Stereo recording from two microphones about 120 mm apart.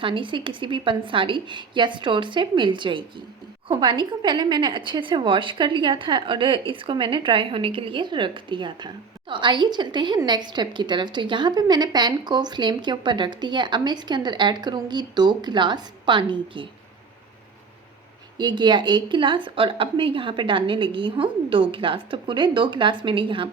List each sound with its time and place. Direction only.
0.0 s a woman's voice: 45° right (ahead or behind)
18.3 s speech: 40° right (ahead or behind)